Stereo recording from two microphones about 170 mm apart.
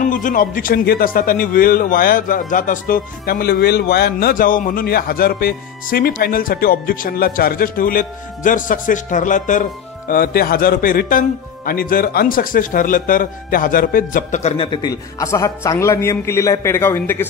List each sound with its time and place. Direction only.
0.0 s a man's voice: 50° left (ahead or behind)
14.6 s a man's voice: 25° left (ahead or behind)